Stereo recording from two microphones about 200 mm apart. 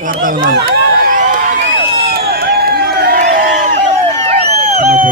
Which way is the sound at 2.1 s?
50° right (ahead or behind).